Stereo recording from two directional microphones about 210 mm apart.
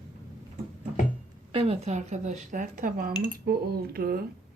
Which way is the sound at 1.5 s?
30° right (ahead or behind).